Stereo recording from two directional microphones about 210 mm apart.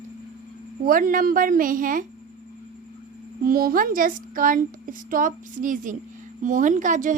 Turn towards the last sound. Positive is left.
turn(degrees=-35)  # may be behind; listen again after turning